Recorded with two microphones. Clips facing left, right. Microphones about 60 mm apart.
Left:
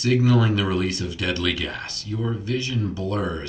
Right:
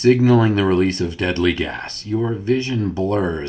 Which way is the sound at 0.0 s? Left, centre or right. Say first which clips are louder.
Right 6 dB; right.